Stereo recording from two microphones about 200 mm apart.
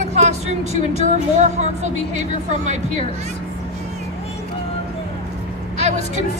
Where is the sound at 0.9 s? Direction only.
35° right (ahead or behind).